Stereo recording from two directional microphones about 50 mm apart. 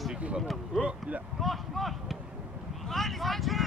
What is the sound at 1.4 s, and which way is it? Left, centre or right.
Speech, centre.